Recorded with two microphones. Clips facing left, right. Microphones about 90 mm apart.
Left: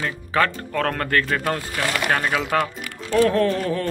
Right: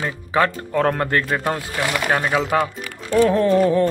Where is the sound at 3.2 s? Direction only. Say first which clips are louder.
Right 6 dB; 15° right (ahead or behind).